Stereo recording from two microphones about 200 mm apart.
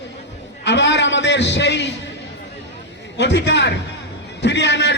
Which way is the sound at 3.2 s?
60° left (ahead or behind).